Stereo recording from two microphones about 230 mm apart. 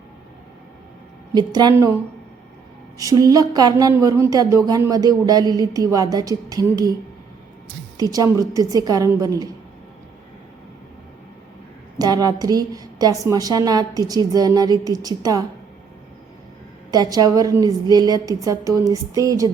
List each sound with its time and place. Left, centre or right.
1.3 s speech: centre
3.0 s speech: centre
7.9 s speech: centre
11.9 s speech: centre
16.9 s speech: centre